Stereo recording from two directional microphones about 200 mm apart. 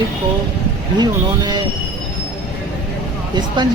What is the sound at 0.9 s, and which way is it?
Speech, 20° right (ahead or behind).